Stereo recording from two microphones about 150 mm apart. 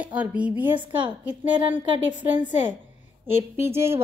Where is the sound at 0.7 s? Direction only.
30° right (ahead or behind).